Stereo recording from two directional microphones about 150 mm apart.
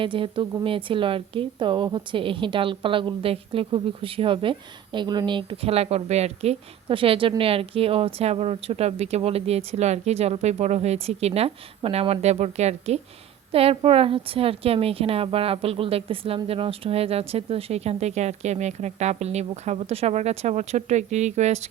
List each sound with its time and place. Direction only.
0.0 s a woman's voice: 35° right (ahead or behind)